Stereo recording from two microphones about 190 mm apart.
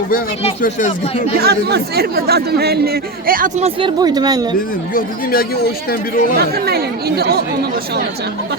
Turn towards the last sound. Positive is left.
turn(degrees=-55)  # may be behind; listen again after turning